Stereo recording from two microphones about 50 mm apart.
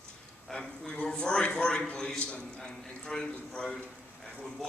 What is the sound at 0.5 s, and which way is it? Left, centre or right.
A man's voice, left.